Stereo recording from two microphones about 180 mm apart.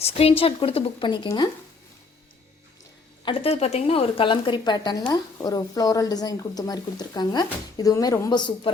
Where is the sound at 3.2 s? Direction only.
35° left (ahead or behind).